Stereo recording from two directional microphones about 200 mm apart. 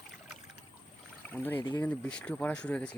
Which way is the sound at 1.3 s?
10° left (ahead or behind).